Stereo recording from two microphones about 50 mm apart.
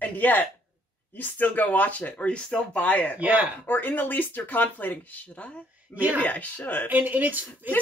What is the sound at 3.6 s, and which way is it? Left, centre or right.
Speech, left.